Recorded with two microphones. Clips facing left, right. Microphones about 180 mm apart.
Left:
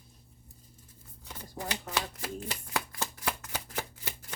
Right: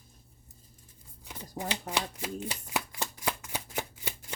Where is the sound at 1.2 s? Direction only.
15° right (ahead or behind).